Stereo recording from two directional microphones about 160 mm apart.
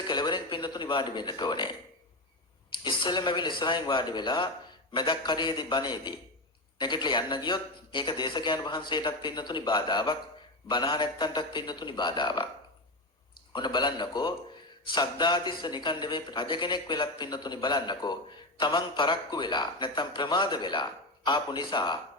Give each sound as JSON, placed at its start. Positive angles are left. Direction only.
{"t": 0.1, "sound": "speech", "side_deg": 30}
{"t": 2.8, "sound": "speech", "side_deg": 30}
{"t": 13.5, "sound": "speech", "side_deg": 30}